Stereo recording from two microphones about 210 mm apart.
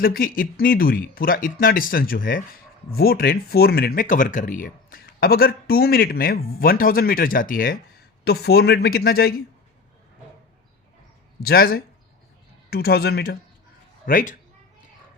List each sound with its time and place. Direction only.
0.0 s speech: 45° left (ahead or behind)
11.4 s speech: 45° left (ahead or behind)